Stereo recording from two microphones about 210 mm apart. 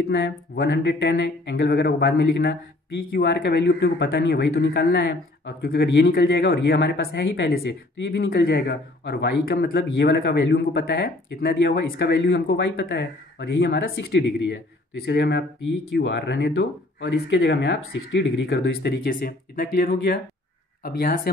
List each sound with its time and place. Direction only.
0.0 s speech: 50° left (ahead or behind)